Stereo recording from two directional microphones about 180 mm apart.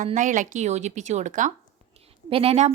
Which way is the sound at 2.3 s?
30° right (ahead or behind).